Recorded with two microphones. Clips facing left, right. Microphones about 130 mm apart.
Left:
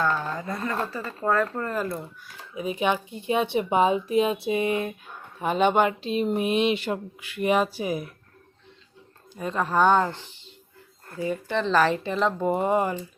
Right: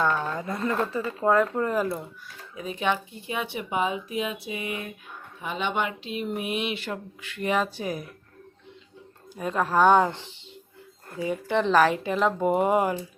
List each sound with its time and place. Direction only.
0.0 s speech: centre (ahead or behind)
1.2 s speech: 15° right (ahead or behind)
2.6 s speech: 15° left (ahead or behind); by 4.9 s 30° left (ahead or behind)
5.4 s speech: 45° left (ahead or behind); by 8.0 s 10° left (ahead or behind)
9.3 s speech: 5° right (ahead or behind)
10.1 s speech: 20° right (ahead or behind)